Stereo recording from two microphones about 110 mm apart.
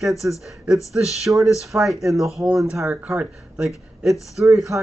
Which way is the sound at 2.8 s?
20° right (ahead or behind).